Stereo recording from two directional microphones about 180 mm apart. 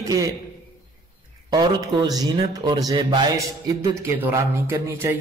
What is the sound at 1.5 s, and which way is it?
A man's voice, 20° right (ahead or behind).